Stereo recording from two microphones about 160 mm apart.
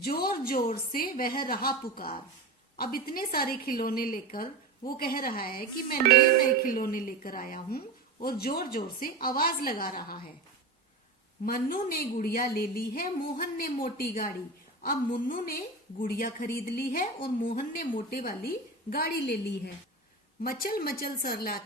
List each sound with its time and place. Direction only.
0.0 s a woman's voice: 70° left (ahead or behind)
11.4 s a woman's voice: 65° left (ahead or behind)
17.4 s a woman's voice: 60° left (ahead or behind); by 19.7 s 90° left
20.4 s a woman's voice: 65° left (ahead or behind)